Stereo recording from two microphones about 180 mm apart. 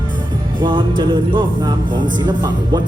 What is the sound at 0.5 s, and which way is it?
Music, 25° right (ahead or behind).